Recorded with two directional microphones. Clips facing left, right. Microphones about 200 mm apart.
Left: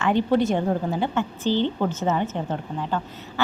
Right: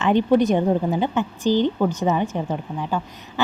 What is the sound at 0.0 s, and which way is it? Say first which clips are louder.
A woman's voice: right 3 dB; 20° right (ahead or behind).